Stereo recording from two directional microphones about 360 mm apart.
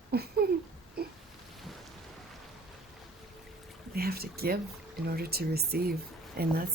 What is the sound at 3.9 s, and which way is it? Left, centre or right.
A woman's voice, right.